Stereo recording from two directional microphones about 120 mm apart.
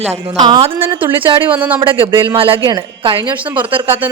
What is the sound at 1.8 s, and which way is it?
Speech, 45° right (ahead or behind).